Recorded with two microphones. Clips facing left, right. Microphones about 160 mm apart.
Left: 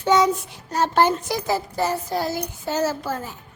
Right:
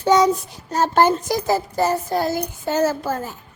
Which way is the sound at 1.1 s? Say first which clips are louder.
Right 3 dB; 40° right (ahead or behind).